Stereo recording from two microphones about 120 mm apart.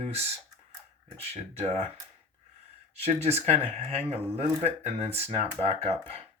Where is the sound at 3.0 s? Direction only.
60° right (ahead or behind).